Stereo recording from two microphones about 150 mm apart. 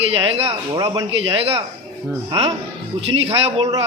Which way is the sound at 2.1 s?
30° right (ahead or behind).